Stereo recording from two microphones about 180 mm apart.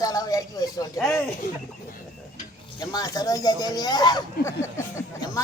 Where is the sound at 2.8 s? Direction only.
20° left (ahead or behind).